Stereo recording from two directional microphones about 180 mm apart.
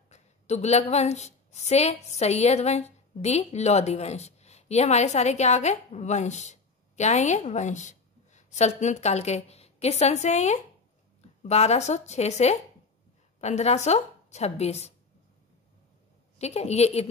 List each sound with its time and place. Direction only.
0.1 s a woman's voice: 40° left (ahead or behind)
16.3 s a woman's voice: 35° left (ahead or behind)